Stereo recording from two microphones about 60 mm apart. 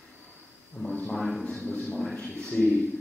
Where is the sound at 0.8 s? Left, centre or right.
Centre.